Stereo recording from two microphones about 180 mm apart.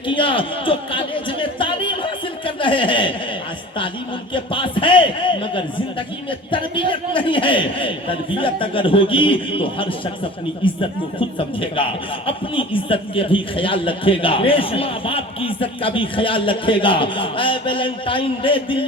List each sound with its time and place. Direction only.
0.1 s a man's voice: 30° left (ahead or behind)
4.4 s a man's voice: 30° left (ahead or behind)